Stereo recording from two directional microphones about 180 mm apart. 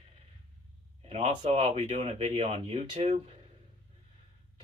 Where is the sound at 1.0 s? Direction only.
35° right (ahead or behind).